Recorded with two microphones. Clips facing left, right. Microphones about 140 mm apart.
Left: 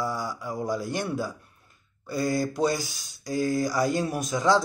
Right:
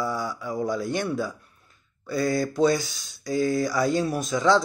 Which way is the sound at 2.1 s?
10° left (ahead or behind).